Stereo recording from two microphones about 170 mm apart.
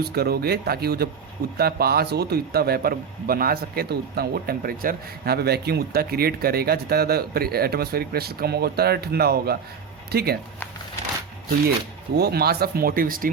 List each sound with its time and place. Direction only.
0.0 s a man's voice: 70° right (ahead or behind)
12.1 s a man's voice: 70° right (ahead or behind)